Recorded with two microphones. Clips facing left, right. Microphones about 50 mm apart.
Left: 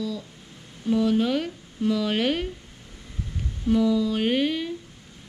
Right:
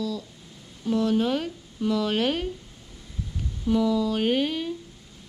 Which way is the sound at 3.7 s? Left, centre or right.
Centre.